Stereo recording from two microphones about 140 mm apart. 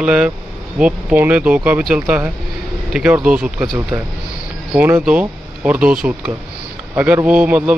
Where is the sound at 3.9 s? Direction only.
30° right (ahead or behind).